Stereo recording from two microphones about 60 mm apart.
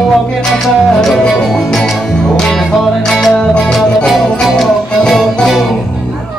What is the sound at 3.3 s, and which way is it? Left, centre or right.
Music, centre.